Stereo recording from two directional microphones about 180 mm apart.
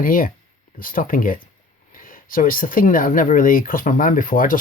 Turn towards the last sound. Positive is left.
turn(degrees=50)  # may be behind; listen again after turning